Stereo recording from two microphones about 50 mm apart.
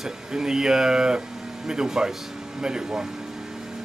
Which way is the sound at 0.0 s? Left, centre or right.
Centre.